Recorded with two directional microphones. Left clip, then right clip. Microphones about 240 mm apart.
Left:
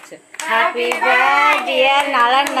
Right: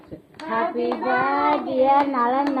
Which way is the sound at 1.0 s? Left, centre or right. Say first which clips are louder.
Left 9 dB; left.